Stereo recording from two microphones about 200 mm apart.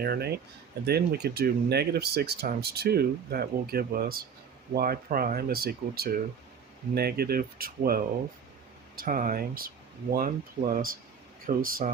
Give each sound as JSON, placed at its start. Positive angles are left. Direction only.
{"t": 0.0, "sound": "speech", "side_deg": -50}